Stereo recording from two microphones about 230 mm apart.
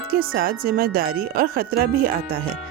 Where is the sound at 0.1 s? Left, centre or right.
Right.